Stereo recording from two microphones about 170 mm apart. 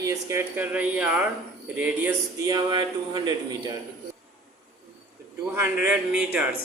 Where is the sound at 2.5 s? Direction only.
25° right (ahead or behind).